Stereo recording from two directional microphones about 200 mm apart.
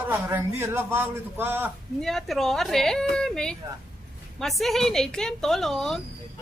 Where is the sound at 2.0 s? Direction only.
Centre (ahead or behind).